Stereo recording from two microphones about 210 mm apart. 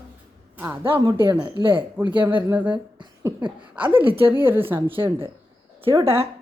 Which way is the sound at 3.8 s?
10° right (ahead or behind).